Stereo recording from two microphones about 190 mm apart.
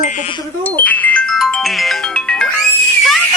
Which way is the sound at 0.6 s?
10° left (ahead or behind).